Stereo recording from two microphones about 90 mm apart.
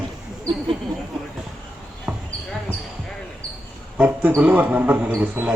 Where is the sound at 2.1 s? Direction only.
20° right (ahead or behind).